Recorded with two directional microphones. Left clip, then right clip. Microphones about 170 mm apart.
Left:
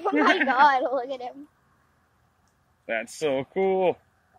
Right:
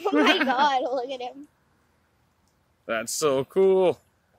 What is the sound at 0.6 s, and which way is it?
Speech, centre (ahead or behind).